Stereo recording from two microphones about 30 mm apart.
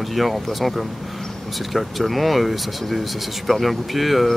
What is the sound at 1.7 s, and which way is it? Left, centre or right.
Speech, centre.